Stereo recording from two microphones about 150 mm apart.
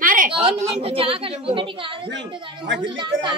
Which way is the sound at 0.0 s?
65° right (ahead or behind).